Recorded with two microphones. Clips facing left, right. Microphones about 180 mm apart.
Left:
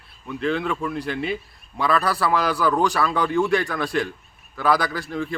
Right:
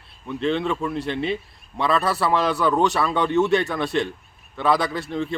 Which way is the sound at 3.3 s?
25° right (ahead or behind).